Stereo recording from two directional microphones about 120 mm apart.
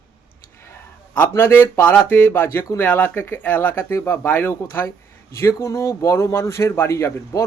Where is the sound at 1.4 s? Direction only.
15° left (ahead or behind).